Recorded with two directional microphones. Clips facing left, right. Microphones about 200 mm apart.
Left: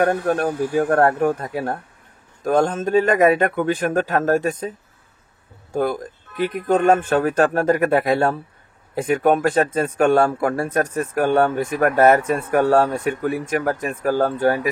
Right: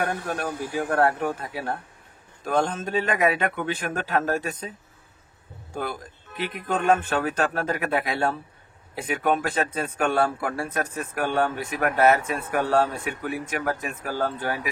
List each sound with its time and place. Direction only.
0.0 s speech: 45° left (ahead or behind)
5.8 s speech: 45° left (ahead or behind)